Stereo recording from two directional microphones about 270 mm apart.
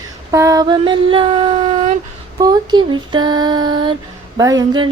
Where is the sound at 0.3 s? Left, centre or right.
Centre.